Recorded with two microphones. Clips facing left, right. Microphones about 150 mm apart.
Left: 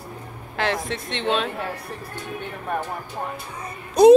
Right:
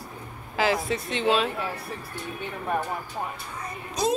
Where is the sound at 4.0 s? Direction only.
55° left (ahead or behind).